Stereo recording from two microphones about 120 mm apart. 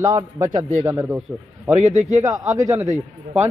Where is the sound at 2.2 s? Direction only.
30° right (ahead or behind).